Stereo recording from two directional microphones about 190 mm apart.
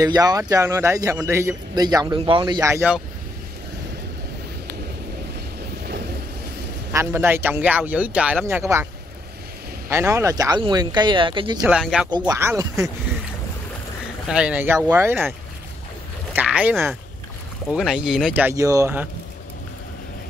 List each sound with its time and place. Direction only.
0.0 s a man's voice: 20° right (ahead or behind)
6.9 s a man's voice: 15° right (ahead or behind)
9.8 s speech: 15° right (ahead or behind)
11.6 s speech: 5° right (ahead or behind)
12.1 s a man's voice: 15° right (ahead or behind)
14.2 s a man's voice: 5° right (ahead or behind)
16.3 s a man's voice: 10° right (ahead or behind)